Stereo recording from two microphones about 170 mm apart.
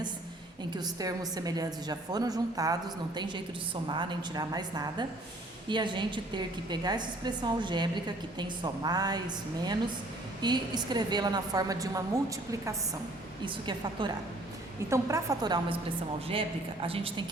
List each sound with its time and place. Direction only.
0.7 s a woman's voice: 25° right (ahead or behind)
13.4 s a woman's voice: 30° right (ahead or behind)
14.8 s a woman's voice: 15° right (ahead or behind); by 17.2 s 30° right (ahead or behind)